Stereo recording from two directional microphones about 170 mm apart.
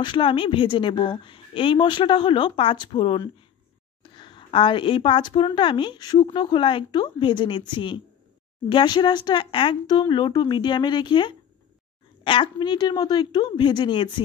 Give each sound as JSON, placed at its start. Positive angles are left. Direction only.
{"t": 0.0, "sound": "a woman's voice", "side_deg": 30}